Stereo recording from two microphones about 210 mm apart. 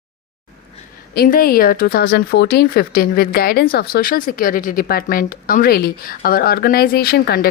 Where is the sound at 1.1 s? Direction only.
45° left (ahead or behind).